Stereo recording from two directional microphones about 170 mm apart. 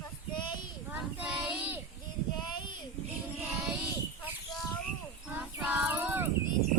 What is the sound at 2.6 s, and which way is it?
Child singing, 25° left (ahead or behind).